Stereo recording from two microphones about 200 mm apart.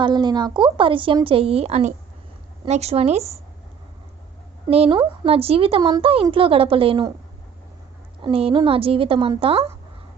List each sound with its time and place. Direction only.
0.0 s a woman's voice: 20° right (ahead or behind)
4.7 s a woman's voice: 25° right (ahead or behind)
8.2 s a woman's voice: 30° right (ahead or behind)